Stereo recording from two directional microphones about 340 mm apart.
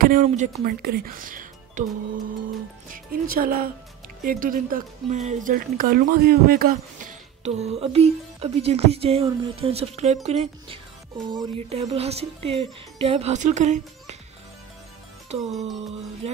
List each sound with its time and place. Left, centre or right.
0.0 s speech: right
2.9 s speech: right
15.2 s music: centre